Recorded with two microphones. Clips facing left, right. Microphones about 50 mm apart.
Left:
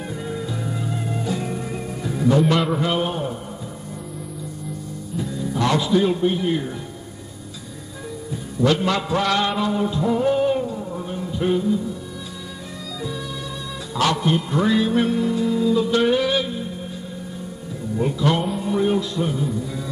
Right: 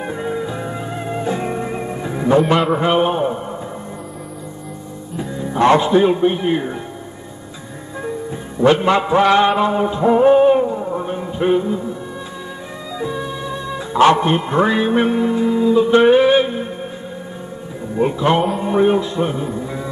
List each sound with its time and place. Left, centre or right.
0.0 s music: right
2.7 s a man's voice: right
5.1 s speech: right
8.0 s music: right
13.0 s music: right
17.9 s a man's voice: right